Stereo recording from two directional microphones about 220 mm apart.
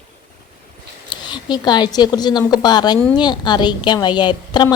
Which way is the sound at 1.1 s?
20° left (ahead or behind).